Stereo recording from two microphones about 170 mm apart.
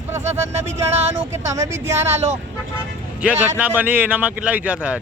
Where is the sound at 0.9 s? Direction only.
40° right (ahead or behind).